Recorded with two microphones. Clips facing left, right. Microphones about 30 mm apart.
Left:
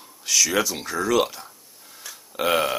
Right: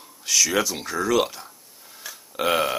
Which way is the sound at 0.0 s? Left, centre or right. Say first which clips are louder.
Even; centre.